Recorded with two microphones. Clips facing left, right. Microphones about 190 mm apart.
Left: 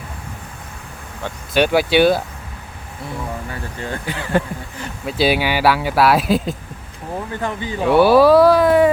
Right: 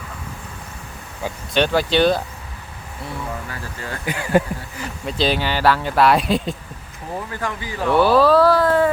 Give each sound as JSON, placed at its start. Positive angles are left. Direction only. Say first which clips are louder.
{"t": 1.5, "sound": "speech", "louder": "left 3 dB", "side_deg": 10}
{"t": 3.5, "sound": "speech", "louder": "left 3 dB", "side_deg": 25}
{"t": 4.0, "sound": "speech", "louder": "right 3 dB", "side_deg": -10}
{"t": 5.0, "sound": "speech", "louder": "left 3 dB", "side_deg": 10}
{"t": 7.4, "sound": "speech", "louder": "left 4 dB", "side_deg": 25}
{"t": 7.9, "sound": "speech", "louder": "left 4 dB", "side_deg": 10}